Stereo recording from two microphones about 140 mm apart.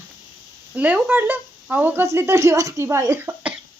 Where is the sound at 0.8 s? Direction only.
10° right (ahead or behind).